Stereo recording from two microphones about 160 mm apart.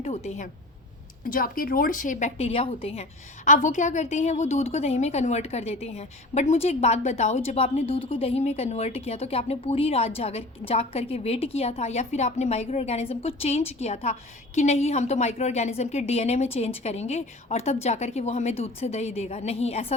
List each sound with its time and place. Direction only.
0.0 s a woman's voice: 40° left (ahead or behind)
1.3 s a woman's voice: 65° left (ahead or behind); by 20.0 s 40° left (ahead or behind)